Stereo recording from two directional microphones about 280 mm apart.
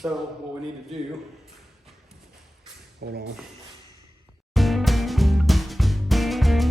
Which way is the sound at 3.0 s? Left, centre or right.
Right.